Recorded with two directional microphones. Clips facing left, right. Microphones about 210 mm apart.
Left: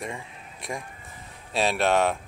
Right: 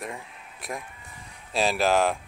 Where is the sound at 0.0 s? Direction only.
Centre (ahead or behind).